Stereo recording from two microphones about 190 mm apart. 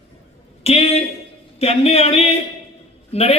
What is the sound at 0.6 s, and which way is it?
A man's voice, 30° left (ahead or behind).